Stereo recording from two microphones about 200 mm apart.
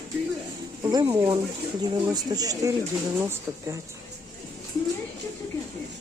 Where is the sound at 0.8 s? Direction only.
15° right (ahead or behind).